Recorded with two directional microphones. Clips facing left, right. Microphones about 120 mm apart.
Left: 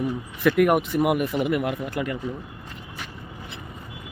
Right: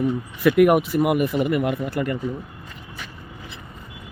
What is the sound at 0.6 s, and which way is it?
Speech, centre (ahead or behind).